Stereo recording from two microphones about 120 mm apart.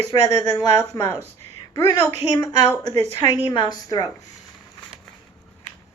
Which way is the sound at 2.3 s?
35° left (ahead or behind).